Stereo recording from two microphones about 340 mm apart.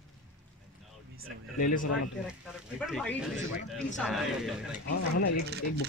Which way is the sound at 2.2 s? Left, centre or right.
Centre.